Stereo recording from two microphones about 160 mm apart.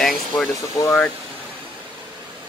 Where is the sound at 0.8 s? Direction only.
20° left (ahead or behind).